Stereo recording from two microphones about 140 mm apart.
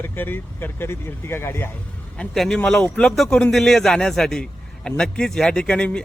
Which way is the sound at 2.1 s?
5° left (ahead or behind).